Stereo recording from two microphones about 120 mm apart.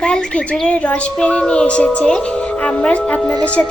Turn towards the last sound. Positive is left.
turn(degrees=10)  # may be behind; listen again after turning